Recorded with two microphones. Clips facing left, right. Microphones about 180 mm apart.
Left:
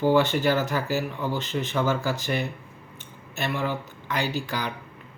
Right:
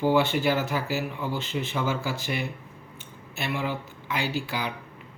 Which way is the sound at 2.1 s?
45° left (ahead or behind).